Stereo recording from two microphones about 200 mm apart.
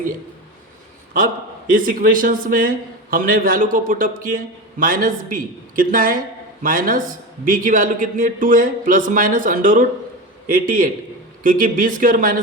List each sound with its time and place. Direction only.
1.7 s a man's voice: 45° right (ahead or behind)